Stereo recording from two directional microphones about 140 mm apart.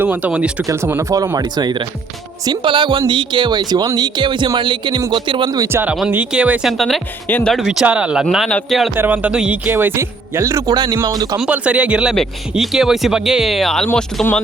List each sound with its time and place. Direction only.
0.0 s speech: 10° right (ahead or behind)
0.7 s speech: 20° right (ahead or behind); by 5.5 s 35° right (ahead or behind)
5.5 s speech: 20° right (ahead or behind)
11.3 s speech: 10° right (ahead or behind)